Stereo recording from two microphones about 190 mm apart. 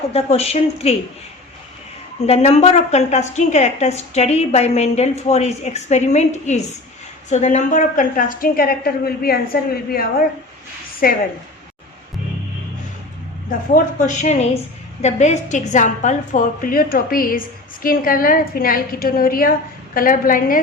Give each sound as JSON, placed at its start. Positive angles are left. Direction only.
{"t": 0.1, "sound": "a woman's voice", "side_deg": 30}
{"t": 2.2, "sound": "a woman's voice", "side_deg": 35}
{"t": 13.7, "sound": "a woman's voice", "side_deg": 40}